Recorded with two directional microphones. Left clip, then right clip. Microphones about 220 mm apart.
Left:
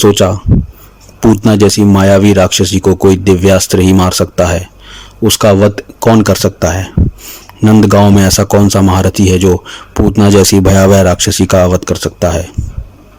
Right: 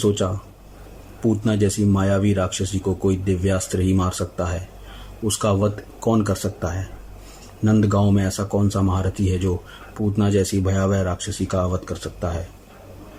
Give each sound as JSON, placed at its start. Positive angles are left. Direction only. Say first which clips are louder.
{"t": 0.0, "sound": "speech", "louder": "left 14 dB", "side_deg": 40}